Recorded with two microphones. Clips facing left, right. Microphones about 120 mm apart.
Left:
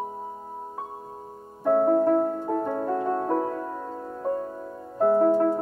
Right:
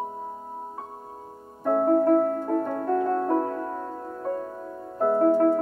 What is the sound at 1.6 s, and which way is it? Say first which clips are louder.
Music: even; 5° left (ahead or behind).